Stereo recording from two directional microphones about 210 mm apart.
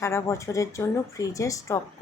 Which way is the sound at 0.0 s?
15° left (ahead or behind).